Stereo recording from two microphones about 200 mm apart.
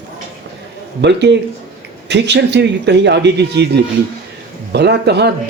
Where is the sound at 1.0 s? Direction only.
60° right (ahead or behind).